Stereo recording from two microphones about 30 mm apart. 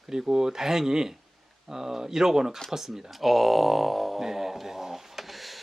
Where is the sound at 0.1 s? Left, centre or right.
Centre.